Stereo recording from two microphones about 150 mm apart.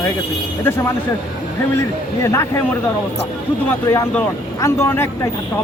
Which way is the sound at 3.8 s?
20° left (ahead or behind).